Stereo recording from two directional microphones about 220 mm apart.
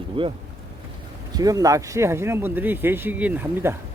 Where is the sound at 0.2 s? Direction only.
25° right (ahead or behind); by 3.8 s 10° right (ahead or behind).